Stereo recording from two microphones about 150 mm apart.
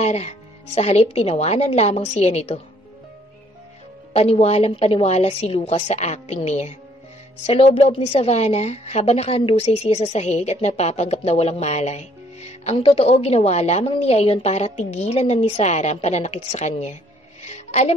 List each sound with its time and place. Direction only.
0.0 s a woman's voice: 45° left (ahead or behind)
4.1 s a woman's voice: 45° left (ahead or behind)
17.4 s music: 50° left (ahead or behind)